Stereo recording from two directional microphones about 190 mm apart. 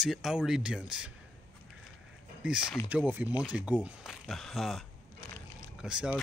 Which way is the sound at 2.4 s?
5° right (ahead or behind).